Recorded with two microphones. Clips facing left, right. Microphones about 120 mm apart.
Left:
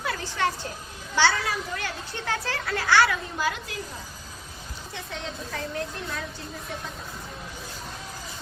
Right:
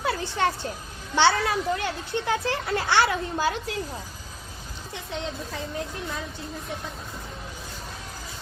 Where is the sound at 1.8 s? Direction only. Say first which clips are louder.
Right 5 dB; 20° right (ahead or behind).